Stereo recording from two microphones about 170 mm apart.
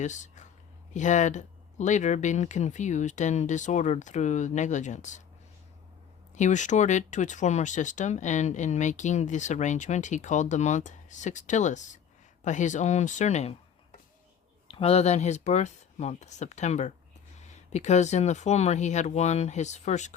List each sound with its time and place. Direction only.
0.0 s speech: 45° left (ahead or behind)
6.3 s speech: 45° left (ahead or behind)
14.7 s speech: 35° left (ahead or behind)